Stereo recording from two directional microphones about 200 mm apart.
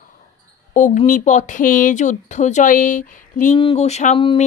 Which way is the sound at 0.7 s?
40° left (ahead or behind).